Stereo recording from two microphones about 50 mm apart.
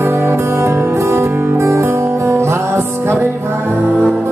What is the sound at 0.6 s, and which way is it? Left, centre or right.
Music, right.